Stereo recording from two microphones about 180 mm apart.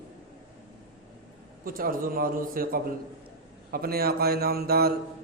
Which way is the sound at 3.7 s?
55° right (ahead or behind).